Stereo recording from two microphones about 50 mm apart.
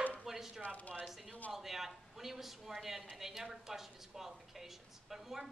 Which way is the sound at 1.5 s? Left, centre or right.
Centre.